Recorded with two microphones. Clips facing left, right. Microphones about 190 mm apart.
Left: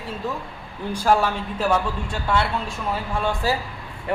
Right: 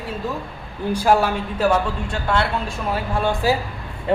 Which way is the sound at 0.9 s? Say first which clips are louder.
Right 2 dB; 5° right (ahead or behind).